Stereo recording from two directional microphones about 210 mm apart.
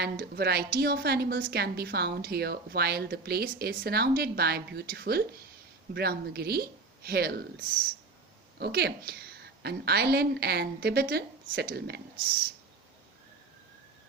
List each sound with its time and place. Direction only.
0.0 s a woman's voice: 50° right (ahead or behind)
8.5 s a woman's voice: 50° right (ahead or behind)